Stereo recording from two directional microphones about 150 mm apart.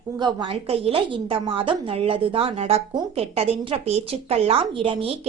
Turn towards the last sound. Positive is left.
turn(degrees=-40)  # may be behind; listen again after turning